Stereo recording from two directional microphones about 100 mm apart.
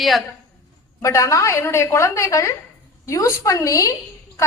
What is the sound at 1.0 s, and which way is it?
A woman's voice, 30° left (ahead or behind).